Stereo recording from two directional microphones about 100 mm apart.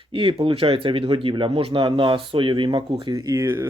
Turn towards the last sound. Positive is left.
turn(degrees=-25)  # may be behind; listen again after turning